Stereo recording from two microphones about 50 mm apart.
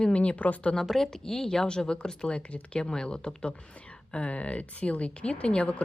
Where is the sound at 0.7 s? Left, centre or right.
Centre.